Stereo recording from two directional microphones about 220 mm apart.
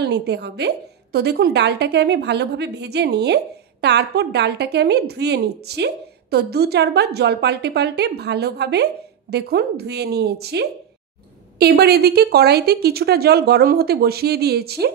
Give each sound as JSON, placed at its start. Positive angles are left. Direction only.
{"t": 0.0, "sound": "a woman's voice", "side_deg": -50}